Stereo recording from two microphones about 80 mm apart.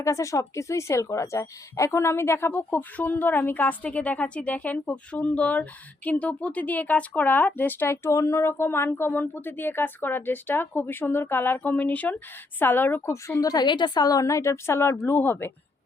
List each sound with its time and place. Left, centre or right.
0.0 s speech: left
2.5 s speech: left
13.5 s a woman's voice: left